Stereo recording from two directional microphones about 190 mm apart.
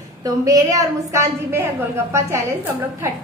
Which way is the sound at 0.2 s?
20° right (ahead or behind).